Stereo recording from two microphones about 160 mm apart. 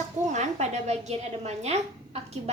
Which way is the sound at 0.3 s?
45° right (ahead or behind).